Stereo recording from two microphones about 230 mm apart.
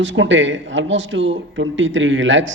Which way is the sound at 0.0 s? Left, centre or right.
Right.